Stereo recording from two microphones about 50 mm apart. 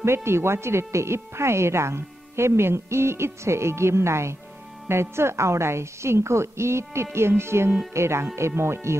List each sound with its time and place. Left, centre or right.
0.0 s speech: right